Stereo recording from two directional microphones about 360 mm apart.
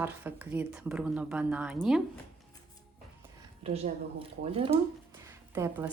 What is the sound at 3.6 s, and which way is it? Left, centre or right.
A woman's voice, centre.